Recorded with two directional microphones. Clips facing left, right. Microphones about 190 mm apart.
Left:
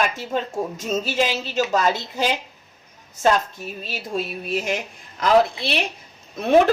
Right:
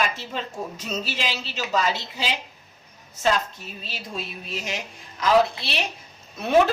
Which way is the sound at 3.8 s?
50° left (ahead or behind).